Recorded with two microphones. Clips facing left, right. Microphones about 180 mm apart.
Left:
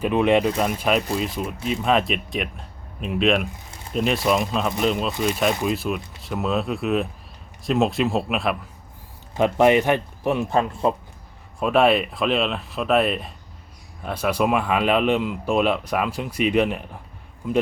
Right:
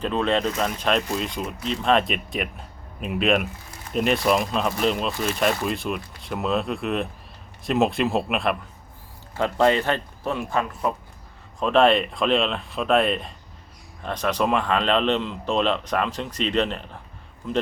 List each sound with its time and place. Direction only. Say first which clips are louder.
0.0 s speech: left 4 dB; 15° left (ahead or behind)
5.1 s speech: left 3 dB; 15° left (ahead or behind)
5.6 s speech: left 3 dB; centre (ahead or behind)
9.3 s speech: left 3 dB; 20° left (ahead or behind)
10.5 s speech: left 2 dB; 30° left (ahead or behind)
11.6 s speech: even; 5° left (ahead or behind)